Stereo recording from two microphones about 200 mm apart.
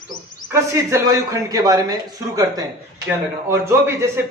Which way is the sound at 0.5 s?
15° right (ahead or behind).